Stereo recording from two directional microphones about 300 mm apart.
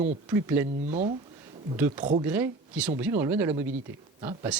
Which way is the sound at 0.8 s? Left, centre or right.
Right.